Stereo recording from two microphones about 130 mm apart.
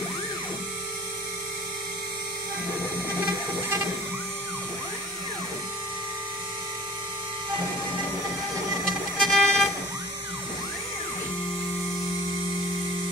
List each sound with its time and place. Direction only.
8.8 s vehicle: centre (ahead or behind)